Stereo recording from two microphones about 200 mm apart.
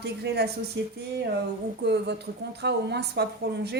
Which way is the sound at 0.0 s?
55° right (ahead or behind).